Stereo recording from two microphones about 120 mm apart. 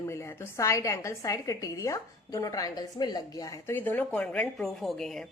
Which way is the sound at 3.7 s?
15° left (ahead or behind).